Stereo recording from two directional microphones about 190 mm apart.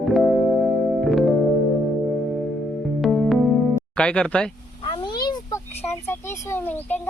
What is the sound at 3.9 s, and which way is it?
Speech, 5° left (ahead or behind).